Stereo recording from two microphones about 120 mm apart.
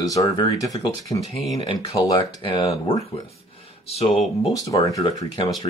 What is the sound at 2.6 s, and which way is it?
Speech, 60° left (ahead or behind).